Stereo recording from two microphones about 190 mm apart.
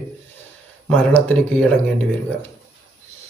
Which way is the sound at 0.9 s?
10° left (ahead or behind).